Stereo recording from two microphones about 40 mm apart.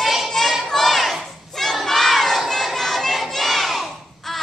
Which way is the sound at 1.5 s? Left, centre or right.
Centre.